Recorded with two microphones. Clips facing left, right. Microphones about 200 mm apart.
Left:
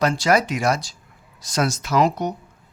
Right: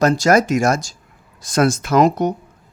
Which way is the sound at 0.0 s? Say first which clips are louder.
Right 5 dB; 45° right (ahead or behind).